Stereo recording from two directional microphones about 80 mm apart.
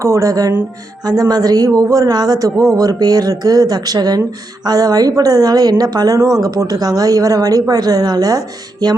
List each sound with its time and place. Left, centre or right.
0.0 s a woman's voice: right